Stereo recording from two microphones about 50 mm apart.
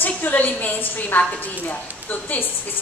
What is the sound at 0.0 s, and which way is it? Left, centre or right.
A woman's voice, left.